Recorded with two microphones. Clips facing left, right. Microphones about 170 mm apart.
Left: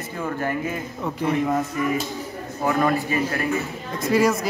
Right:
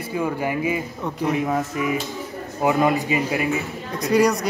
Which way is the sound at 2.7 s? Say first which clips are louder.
Right 2 dB; 15° right (ahead or behind).